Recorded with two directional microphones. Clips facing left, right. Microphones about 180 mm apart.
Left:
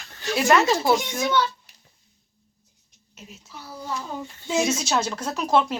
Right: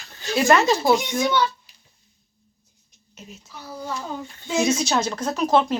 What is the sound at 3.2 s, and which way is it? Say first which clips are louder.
Speech: right 2 dB; 5° left (ahead or behind).